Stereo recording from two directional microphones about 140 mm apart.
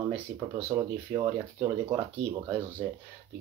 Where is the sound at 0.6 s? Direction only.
25° right (ahead or behind).